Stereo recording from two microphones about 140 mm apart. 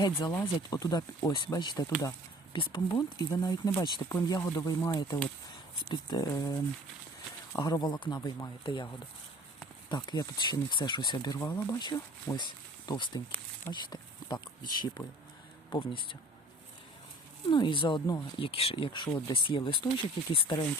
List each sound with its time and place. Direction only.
0.3 s speech: 25° left (ahead or behind)
9.9 s speech: 30° left (ahead or behind)
11.3 s speech: 20° left (ahead or behind)
11.8 s speech: 30° left (ahead or behind)
13.7 s a sound: 35° left (ahead or behind)
14.6 s speech: 30° left (ahead or behind)
17.5 s speech: 35° left (ahead or behind)